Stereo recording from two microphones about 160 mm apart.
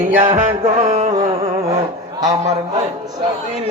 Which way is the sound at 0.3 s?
45° right (ahead or behind).